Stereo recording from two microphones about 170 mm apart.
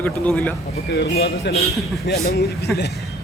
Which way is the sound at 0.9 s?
70° left (ahead or behind).